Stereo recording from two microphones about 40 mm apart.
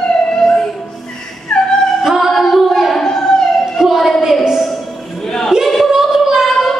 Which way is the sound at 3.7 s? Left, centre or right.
Centre.